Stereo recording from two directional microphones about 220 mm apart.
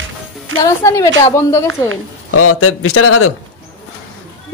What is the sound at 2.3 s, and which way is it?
A man's voice, 80° left.